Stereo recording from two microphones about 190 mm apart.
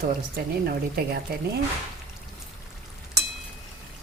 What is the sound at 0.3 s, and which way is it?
Speech, 50° right (ahead or behind).